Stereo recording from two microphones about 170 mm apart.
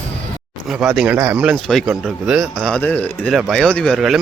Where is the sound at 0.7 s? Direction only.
Centre (ahead or behind).